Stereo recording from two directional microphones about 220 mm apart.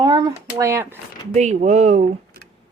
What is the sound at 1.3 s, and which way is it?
Speech, 30° right (ahead or behind).